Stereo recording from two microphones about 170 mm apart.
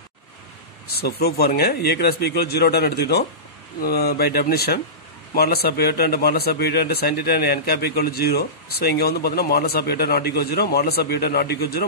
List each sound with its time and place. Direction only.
0.8 s a man's voice: 65° left (ahead or behind)